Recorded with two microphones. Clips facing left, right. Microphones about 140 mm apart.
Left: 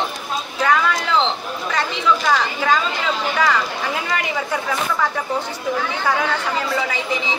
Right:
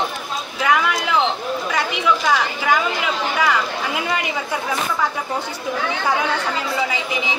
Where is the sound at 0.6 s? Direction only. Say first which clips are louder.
Even; 10° right (ahead or behind).